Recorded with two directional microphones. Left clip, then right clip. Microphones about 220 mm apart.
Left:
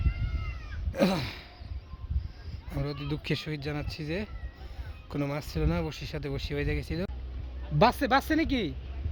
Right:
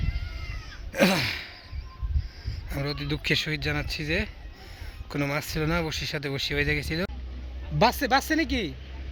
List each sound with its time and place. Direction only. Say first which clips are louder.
0.3 s cat: right 3 dB; centre (ahead or behind)
2.6 s speech: right 4 dB; centre (ahead or behind)
7.8 s speech: right 1 dB; 40° left (ahead or behind)